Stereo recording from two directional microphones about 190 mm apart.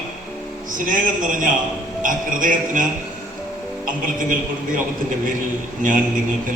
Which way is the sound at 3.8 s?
45° right (ahead or behind).